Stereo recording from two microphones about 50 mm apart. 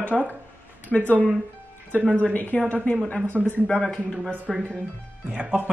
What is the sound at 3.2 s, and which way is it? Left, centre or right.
Speech, right.